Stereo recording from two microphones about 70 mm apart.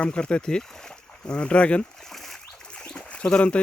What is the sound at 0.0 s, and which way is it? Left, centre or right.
Speech, centre.